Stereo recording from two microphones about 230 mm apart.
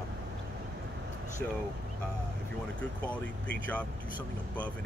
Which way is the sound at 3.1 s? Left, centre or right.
Centre.